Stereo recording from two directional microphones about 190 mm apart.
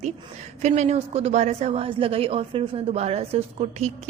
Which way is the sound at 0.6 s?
35° right (ahead or behind).